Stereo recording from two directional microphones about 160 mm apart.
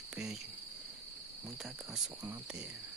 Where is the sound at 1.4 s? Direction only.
Centre (ahead or behind).